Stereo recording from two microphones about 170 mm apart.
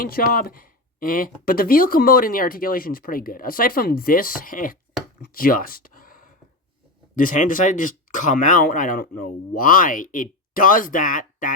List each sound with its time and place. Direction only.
0.0 s speech: 55° left (ahead or behind)